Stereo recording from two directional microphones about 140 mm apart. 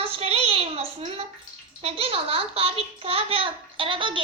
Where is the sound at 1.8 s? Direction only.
45° right (ahead or behind).